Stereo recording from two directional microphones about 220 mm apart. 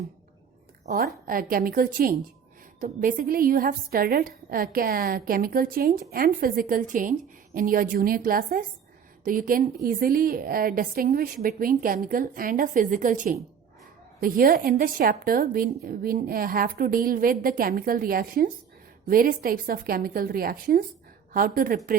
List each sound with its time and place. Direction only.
0.9 s a woman's voice: 45° right (ahead or behind)